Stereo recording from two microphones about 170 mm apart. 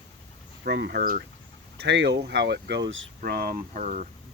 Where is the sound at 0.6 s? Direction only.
80° right; by 1.3 s 65° right (ahead or behind).